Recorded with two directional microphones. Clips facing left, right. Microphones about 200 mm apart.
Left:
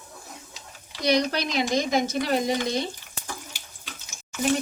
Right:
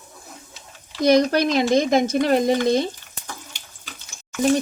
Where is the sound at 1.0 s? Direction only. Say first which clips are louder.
Right 7 dB; 50° right (ahead or behind).